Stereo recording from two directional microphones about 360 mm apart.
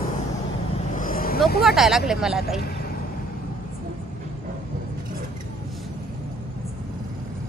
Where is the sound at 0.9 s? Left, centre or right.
Left.